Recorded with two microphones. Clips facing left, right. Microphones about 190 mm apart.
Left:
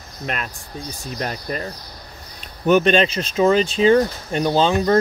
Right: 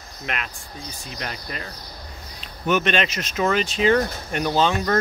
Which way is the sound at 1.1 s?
40° left (ahead or behind).